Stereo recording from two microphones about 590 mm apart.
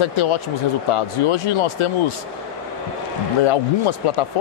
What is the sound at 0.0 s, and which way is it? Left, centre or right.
Speech, left.